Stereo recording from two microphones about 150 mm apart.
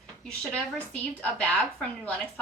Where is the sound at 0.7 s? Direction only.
10° left (ahead or behind).